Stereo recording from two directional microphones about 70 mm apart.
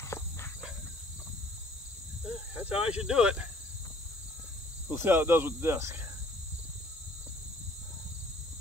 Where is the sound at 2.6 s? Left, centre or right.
Centre.